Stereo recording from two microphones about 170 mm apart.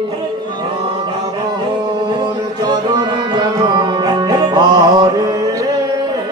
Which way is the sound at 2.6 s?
25° right (ahead or behind).